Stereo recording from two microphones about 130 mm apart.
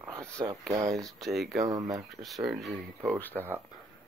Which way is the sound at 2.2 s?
Centre (ahead or behind).